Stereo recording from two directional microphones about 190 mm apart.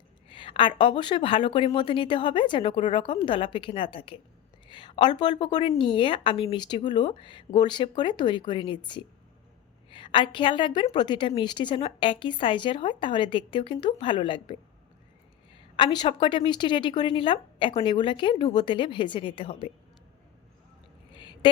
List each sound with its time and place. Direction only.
0.3 s a woman's voice: 25° left (ahead or behind)
15.5 s a woman's voice: 25° left (ahead or behind)
21.1 s a sound: 25° left (ahead or behind)